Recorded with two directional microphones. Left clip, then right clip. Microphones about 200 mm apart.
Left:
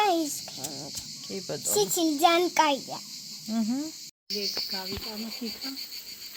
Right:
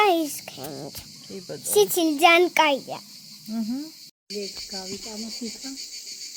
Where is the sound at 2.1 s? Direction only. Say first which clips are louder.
Right 5 dB; 20° right (ahead or behind).